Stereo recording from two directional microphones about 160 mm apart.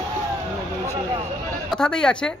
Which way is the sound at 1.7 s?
5° left (ahead or behind).